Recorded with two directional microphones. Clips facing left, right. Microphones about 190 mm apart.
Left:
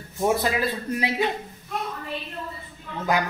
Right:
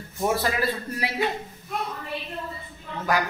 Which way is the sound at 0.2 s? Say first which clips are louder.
Left 2 dB; 20° left (ahead or behind).